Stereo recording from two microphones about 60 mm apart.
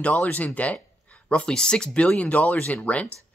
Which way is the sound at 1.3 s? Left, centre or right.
Centre.